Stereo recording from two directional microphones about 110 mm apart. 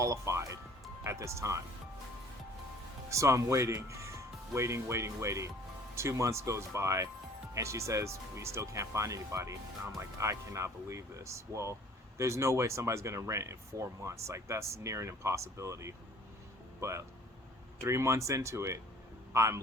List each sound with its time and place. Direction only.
0.0 s speech: 30° right (ahead or behind)
3.1 s speech: 25° right (ahead or behind)
17.7 s a man's voice: 25° right (ahead or behind)